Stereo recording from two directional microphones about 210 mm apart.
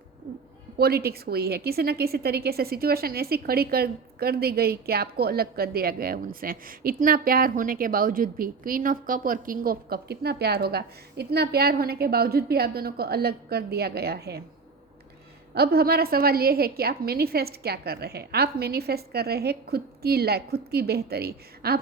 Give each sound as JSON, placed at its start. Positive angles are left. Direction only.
{"t": 0.8, "sound": "a woman's voice", "side_deg": -50}
{"t": 15.5, "sound": "a woman's voice", "side_deg": -50}